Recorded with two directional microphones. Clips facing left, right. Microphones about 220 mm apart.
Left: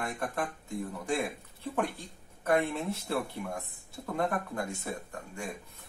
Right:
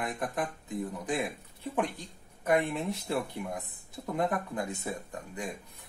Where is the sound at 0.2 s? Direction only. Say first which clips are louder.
Right 1 dB; 15° right (ahead or behind).